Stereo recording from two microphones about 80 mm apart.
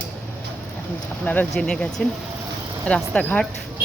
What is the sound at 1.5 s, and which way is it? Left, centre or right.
Speech, centre.